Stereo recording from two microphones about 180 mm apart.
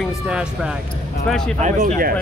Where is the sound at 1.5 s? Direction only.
45° right (ahead or behind).